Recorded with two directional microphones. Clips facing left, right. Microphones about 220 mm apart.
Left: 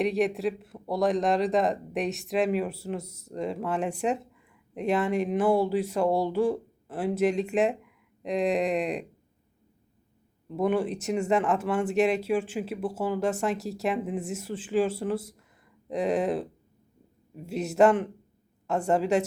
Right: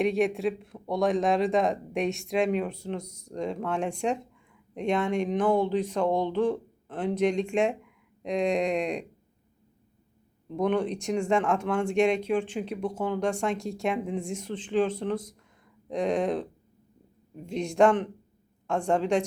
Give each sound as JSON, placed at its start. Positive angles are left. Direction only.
{"t": 0.0, "sound": "speech", "side_deg": 0}
{"t": 10.5, "sound": "speech", "side_deg": 5}